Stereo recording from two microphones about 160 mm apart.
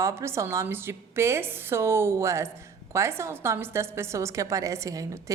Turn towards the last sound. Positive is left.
turn(degrees=-20)  # may be behind; listen again after turning